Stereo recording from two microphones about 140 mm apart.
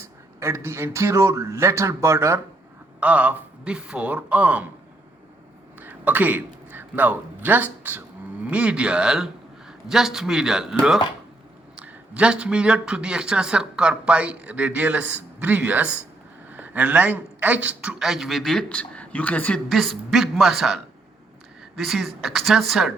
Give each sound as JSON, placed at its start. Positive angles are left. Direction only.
{"t": 0.3, "sound": "a man's voice", "side_deg": -20}
{"t": 3.0, "sound": "speech", "side_deg": -10}
{"t": 5.8, "sound": "a man's voice", "side_deg": -10}